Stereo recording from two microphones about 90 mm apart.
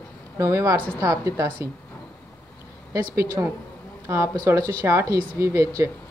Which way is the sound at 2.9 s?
35° right (ahead or behind).